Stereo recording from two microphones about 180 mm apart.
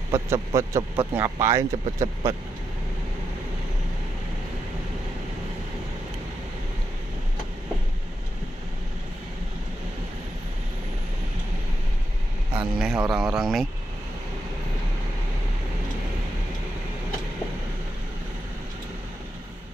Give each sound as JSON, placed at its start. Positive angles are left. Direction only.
{"t": 0.1, "sound": "a man's voice", "side_deg": -15}
{"t": 12.5, "sound": "speech", "side_deg": -5}